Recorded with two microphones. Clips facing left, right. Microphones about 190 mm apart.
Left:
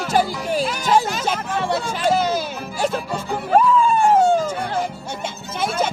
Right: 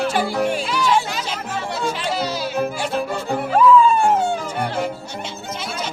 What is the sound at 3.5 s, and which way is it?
Music, 50° left (ahead or behind).